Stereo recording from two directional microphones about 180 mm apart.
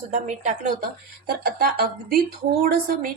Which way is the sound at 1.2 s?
55° right (ahead or behind).